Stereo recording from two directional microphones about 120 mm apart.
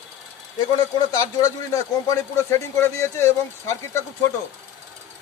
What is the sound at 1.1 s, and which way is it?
Speech, 30° left (ahead or behind).